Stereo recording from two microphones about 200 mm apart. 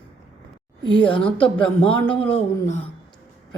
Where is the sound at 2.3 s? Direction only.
30° left (ahead or behind).